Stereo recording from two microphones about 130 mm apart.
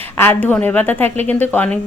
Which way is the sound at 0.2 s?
15° left (ahead or behind).